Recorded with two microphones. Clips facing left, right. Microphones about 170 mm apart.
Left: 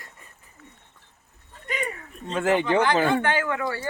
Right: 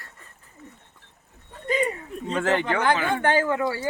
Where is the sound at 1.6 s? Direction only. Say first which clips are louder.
Right 7 dB; 30° right (ahead or behind).